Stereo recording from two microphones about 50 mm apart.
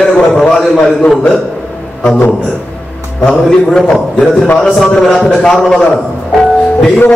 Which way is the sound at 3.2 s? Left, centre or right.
Centre.